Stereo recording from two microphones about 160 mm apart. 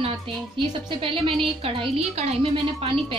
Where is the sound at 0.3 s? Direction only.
35° right (ahead or behind).